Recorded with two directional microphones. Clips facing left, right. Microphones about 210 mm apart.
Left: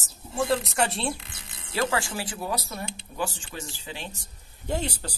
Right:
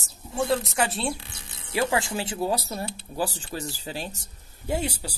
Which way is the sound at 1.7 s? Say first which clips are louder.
Right 2 dB; 15° right (ahead or behind).